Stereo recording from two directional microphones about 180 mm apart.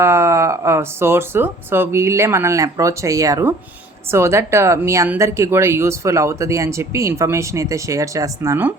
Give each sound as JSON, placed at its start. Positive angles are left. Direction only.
{"t": 0.0, "sound": "speech", "side_deg": -15}